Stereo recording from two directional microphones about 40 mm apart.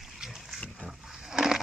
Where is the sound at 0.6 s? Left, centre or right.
Centre.